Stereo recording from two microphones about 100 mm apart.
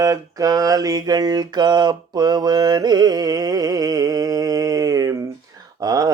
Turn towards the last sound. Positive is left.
turn(degrees=-40)  # may be behind; listen again after turning